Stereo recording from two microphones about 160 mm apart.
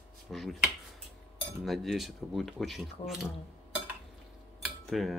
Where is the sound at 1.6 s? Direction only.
Centre (ahead or behind).